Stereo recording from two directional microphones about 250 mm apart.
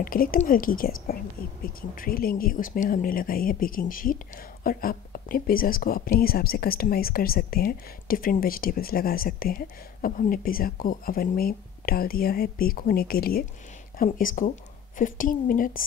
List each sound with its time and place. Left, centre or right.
0.0 s a woman's voice: left